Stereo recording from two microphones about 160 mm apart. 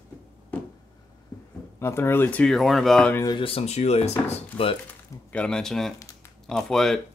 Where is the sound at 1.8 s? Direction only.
15° left (ahead or behind).